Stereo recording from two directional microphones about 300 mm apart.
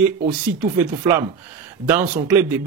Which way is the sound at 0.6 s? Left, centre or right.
Centre.